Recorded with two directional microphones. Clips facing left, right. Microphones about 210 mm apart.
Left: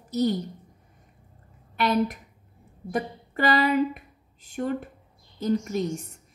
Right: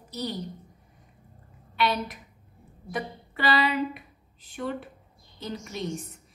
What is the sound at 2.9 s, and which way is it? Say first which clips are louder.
A woman's voice: left 4 dB; 45° left (ahead or behind).